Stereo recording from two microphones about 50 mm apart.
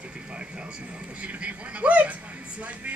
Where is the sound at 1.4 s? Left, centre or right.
Right.